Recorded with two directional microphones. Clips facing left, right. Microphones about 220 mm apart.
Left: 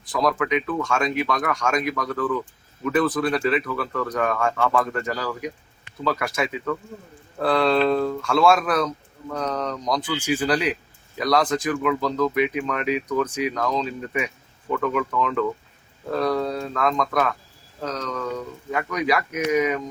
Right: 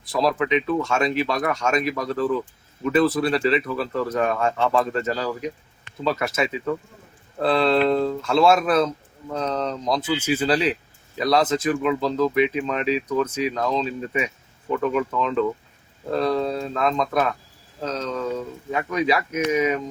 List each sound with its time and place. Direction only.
0.1 s speech: 25° right (ahead or behind)